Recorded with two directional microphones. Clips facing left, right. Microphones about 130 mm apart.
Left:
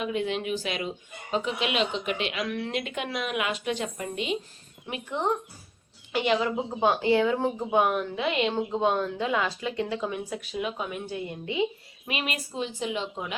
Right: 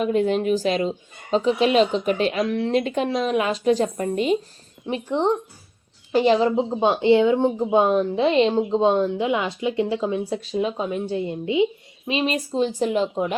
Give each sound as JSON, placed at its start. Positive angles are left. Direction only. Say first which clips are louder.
{"t": 0.0, "sound": "speech", "louder": "right 8 dB", "side_deg": -40}